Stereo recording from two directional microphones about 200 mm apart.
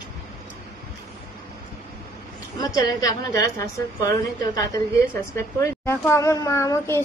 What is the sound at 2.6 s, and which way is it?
A woman's voice, 20° left (ahead or behind).